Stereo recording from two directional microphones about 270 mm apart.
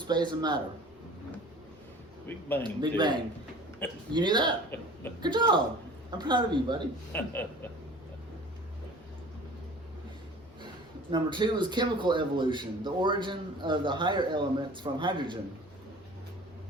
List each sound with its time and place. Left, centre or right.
0.0 s speech: centre
2.2 s speech: centre
2.6 s speech: centre
4.7 s speech: centre
5.2 s speech: centre
7.1 s speech: centre
11.1 s speech: centre